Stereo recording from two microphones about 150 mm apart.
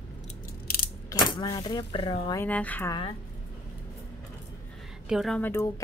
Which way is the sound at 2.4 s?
10° left (ahead or behind).